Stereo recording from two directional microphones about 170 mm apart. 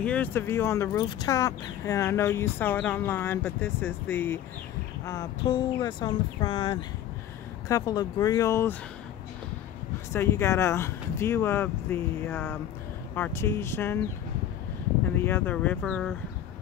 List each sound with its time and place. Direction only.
0.0 s speech: 10° left (ahead or behind)
10.1 s speech: 15° left (ahead or behind)
15.1 s speech: 10° left (ahead or behind)